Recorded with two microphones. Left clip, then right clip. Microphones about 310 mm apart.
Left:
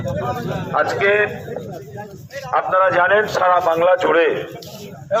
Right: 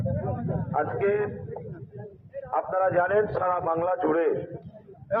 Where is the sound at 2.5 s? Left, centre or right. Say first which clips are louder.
Left 9 dB; centre.